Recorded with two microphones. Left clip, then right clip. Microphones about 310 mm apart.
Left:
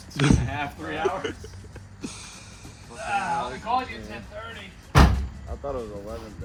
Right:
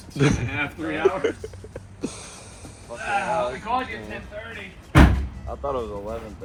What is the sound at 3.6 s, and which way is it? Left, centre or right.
Speech, left.